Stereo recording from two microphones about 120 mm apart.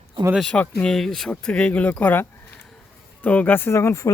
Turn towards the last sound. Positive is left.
turn(degrees=25)  # may be behind; listen again after turning